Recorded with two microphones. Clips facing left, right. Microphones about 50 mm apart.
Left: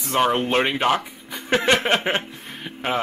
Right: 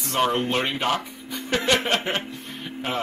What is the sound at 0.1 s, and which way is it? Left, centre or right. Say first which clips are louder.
Speech: left 3 dB; centre.